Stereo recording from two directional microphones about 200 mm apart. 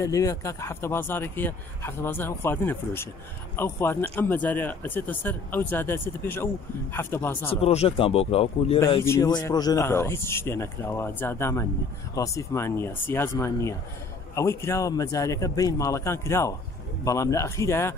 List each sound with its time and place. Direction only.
0.0 s speech: 15° left (ahead or behind)
7.6 s speech: 30° left (ahead or behind)
8.7 s speech: 15° left (ahead or behind)